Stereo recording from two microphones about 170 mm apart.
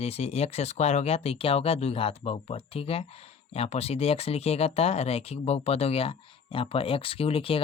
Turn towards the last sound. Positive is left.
turn(degrees=35)  # may be behind; listen again after turning